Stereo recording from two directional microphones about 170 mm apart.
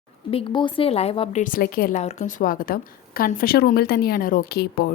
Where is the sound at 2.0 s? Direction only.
45° left (ahead or behind).